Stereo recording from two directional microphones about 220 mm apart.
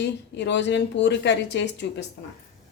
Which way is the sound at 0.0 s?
55° left (ahead or behind).